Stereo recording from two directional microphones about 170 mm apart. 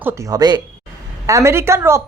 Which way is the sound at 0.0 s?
15° right (ahead or behind).